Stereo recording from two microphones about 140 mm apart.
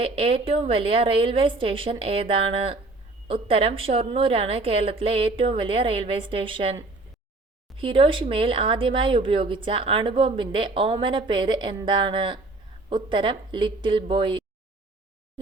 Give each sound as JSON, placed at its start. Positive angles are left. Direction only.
{"t": 0.0, "sound": "speech", "side_deg": -45}
{"t": 7.8, "sound": "speech", "side_deg": -35}